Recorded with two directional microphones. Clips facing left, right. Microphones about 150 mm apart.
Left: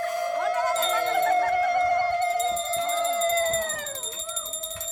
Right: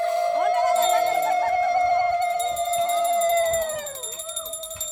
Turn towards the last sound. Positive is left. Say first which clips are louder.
# right 4 dB
turn(degrees=-20)  # may be behind; listen again after turning